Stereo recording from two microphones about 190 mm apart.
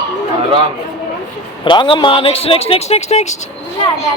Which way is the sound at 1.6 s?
25° left (ahead or behind).